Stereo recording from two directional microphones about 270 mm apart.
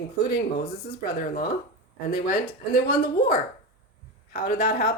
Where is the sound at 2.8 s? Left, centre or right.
Left.